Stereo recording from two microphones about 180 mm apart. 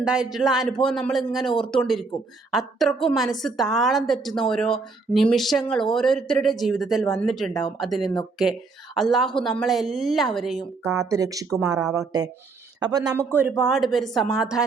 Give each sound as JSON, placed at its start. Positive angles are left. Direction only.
{"t": 0.0, "sound": "a woman's voice", "side_deg": -5}
{"t": 11.1, "sound": "speech", "side_deg": -20}
{"t": 13.6, "sound": "a woman's voice", "side_deg": 0}